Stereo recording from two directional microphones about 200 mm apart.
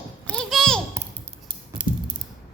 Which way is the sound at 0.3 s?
5° left (ahead or behind).